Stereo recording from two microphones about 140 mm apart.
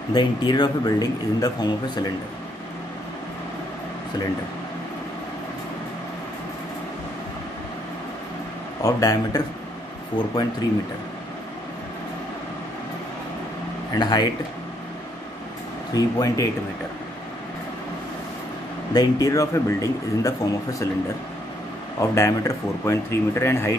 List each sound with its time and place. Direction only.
0.1 s speech: 30° left (ahead or behind)
8.8 s speech: 25° left (ahead or behind)
13.9 s speech: 30° left (ahead or behind)
15.9 s speech: 25° left (ahead or behind)
18.9 s speech: 25° left (ahead or behind)
22.1 s speech: 20° left (ahead or behind)